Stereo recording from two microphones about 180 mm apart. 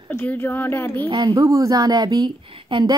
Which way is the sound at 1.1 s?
20° right (ahead or behind).